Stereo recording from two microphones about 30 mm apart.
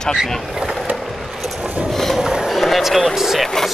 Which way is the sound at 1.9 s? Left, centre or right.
Centre.